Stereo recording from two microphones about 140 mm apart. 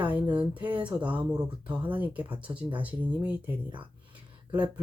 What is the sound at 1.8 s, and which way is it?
Speech, 10° right (ahead or behind).